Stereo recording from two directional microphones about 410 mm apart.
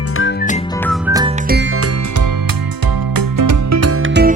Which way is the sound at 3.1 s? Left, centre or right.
Right.